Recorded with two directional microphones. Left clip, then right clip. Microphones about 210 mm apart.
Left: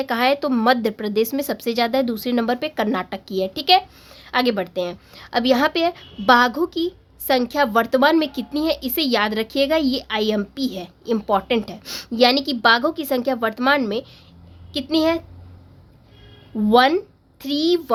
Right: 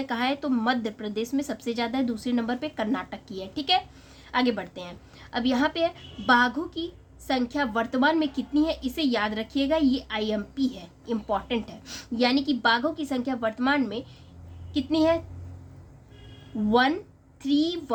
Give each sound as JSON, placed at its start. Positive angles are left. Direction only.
{"t": 0.0, "sound": "speech", "side_deg": 50}
{"t": 16.6, "sound": "speech", "side_deg": 50}